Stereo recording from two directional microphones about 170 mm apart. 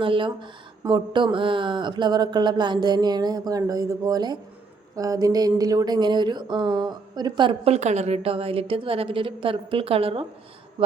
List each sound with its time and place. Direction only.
0.0 s speech: 30° right (ahead or behind)